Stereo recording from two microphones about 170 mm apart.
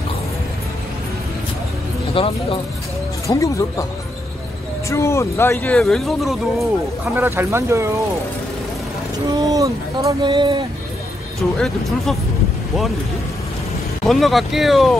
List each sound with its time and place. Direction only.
2.1 s speech: 30° left (ahead or behind)
3.3 s speech: 20° left (ahead or behind)
4.8 s speech: 15° left (ahead or behind); by 6.7 s centre (ahead or behind)
7.2 s speech: 15° right (ahead or behind)
9.4 s speech: 20° right (ahead or behind)
11.5 s speech: centre (ahead or behind)
14.0 s speech: centre (ahead or behind)